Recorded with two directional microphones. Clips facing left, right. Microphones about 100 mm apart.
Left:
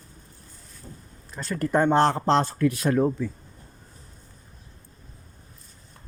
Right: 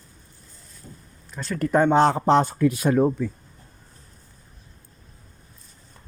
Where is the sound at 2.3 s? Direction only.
15° right (ahead or behind).